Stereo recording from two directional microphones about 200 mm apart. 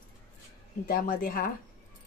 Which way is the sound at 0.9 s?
45° left (ahead or behind).